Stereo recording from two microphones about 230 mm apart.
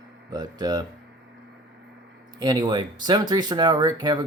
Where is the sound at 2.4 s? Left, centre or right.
Centre.